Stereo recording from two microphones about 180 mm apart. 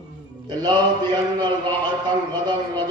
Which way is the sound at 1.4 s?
25° right (ahead or behind).